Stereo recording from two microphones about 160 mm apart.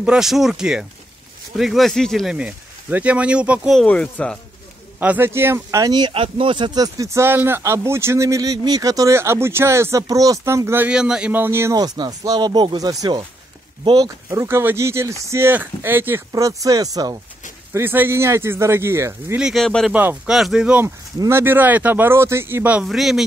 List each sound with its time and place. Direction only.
0.0 s speech: 5° right (ahead or behind)
5.0 s speech: 10° right (ahead or behind)
19.3 s speech: centre (ahead or behind)
19.9 s speech: 10° right (ahead or behind)
20.8 s speech: 15° right (ahead or behind)